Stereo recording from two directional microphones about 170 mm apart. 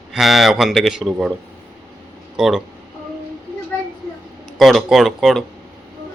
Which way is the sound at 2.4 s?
Centre (ahead or behind).